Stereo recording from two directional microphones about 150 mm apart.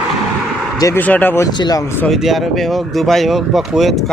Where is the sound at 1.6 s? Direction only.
25° left (ahead or behind).